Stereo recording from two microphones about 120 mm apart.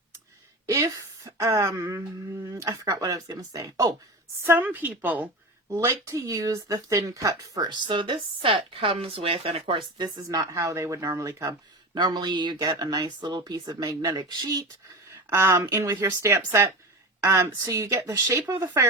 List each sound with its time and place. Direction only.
0.7 s speech: 30° right (ahead or behind)
4.4 s a woman's voice: 20° right (ahead or behind); by 10.1 s 50° right (ahead or behind)
10.2 s speech: 30° right (ahead or behind)
15.1 s speech: 25° right (ahead or behind)